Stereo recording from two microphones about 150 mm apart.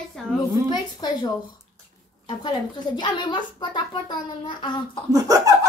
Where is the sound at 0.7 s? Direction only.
25° left (ahead or behind).